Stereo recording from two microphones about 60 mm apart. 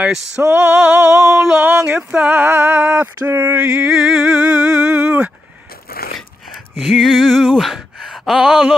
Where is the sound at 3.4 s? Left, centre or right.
Right.